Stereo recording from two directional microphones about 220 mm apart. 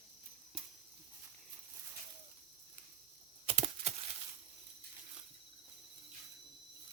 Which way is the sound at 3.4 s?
30° right (ahead or behind).